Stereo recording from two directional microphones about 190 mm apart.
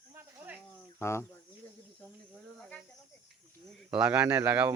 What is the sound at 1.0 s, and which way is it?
Speech, 15° left (ahead or behind).